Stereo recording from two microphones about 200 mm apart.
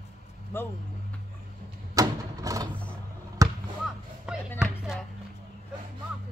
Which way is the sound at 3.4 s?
15° right (ahead or behind).